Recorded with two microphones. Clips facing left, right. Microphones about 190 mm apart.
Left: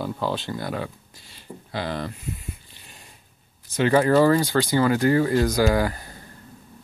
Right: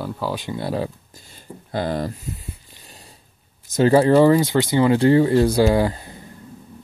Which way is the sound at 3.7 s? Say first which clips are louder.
Right 4 dB; 35° right (ahead or behind).